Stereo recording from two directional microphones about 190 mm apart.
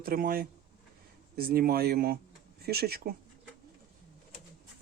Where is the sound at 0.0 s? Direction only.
50° right (ahead or behind).